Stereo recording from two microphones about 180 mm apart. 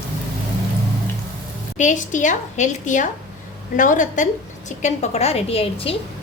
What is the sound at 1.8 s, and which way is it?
A woman's voice, 45° left (ahead or behind).